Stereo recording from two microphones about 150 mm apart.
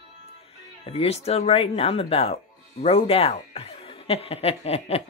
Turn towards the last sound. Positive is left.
turn(degrees=45)  # may be behind; listen again after turning